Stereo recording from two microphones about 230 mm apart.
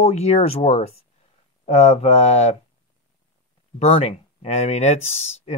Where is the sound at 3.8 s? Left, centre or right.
Left.